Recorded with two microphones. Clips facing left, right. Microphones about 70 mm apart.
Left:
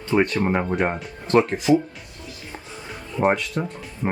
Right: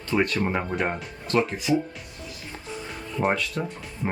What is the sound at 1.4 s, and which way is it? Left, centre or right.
Speech, left.